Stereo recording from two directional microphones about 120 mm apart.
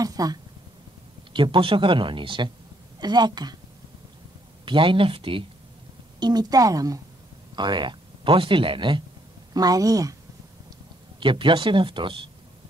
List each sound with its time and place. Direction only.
0.0 s a sound: 30° right (ahead or behind)
1.3 s a woman's voice: 45° right (ahead or behind)
4.6 s speech: 45° right (ahead or behind)
6.1 s a woman's voice: 35° right (ahead or behind)
7.5 s speech: 40° right (ahead or behind)
9.5 s speech: 30° right (ahead or behind)
11.1 s speech: 45° right (ahead or behind)